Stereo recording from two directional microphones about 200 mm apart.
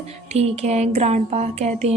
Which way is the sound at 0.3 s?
30° right (ahead or behind).